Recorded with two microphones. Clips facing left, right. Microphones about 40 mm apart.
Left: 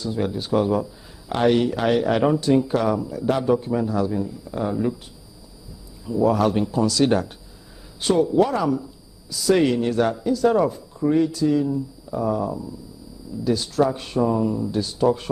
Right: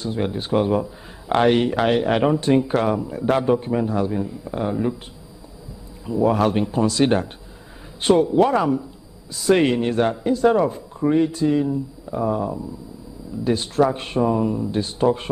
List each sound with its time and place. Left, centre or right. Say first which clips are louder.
0.0 s a man's voice: right 1 dB; right
6.0 s a man's voice: right 1 dB; right